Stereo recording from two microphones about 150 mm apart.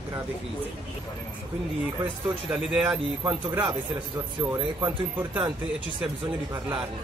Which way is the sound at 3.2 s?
20° right (ahead or behind).